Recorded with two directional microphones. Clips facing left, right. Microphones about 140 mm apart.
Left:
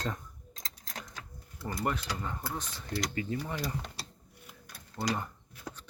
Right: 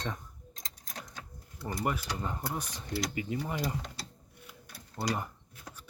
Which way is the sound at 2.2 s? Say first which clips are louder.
Right 2 dB; 20° right (ahead or behind).